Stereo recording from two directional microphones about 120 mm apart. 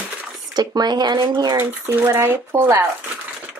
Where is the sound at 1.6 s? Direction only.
20° right (ahead or behind).